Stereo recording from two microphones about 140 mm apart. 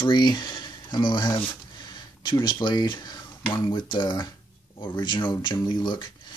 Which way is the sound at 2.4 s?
35° left (ahead or behind).